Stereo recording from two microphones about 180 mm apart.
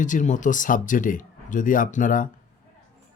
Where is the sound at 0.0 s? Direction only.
45° left (ahead or behind).